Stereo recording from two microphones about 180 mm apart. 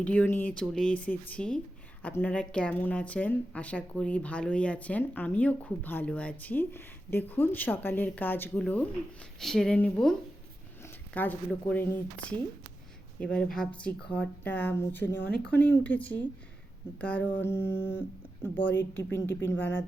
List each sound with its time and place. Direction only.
0.0 s a woman's voice: 10° left (ahead or behind)
15.1 s speech: 70° left (ahead or behind)
15.6 s a woman's voice: 10° left (ahead or behind)